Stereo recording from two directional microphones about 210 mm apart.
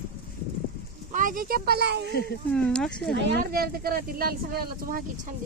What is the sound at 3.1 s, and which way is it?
Speech, 55° right (ahead or behind).